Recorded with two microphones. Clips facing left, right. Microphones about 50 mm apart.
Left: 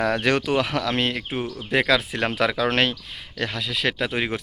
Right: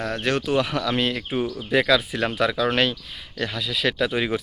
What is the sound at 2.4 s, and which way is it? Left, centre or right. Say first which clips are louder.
Speech: even; left.